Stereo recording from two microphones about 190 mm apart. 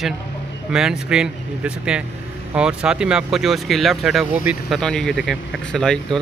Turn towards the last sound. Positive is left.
turn(degrees=5)  # may be behind; listen again after turning